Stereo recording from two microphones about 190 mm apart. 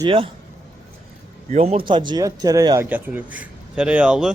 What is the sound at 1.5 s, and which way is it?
A man's voice, 35° right (ahead or behind).